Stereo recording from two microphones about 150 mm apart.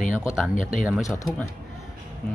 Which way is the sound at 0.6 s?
60° left (ahead or behind).